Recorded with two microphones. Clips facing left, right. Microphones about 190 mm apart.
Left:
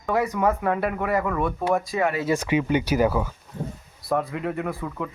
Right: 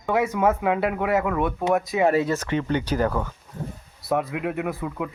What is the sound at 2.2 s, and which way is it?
Speech, 10° left (ahead or behind).